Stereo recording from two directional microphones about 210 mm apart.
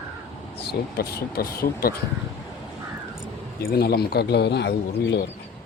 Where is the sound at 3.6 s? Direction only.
50° left (ahead or behind).